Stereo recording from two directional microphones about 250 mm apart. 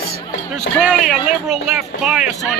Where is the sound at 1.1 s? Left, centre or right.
Centre.